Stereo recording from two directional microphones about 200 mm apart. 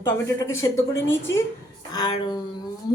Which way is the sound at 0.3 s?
15° left (ahead or behind).